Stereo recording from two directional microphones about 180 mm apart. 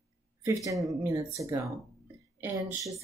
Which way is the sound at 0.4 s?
15° right (ahead or behind).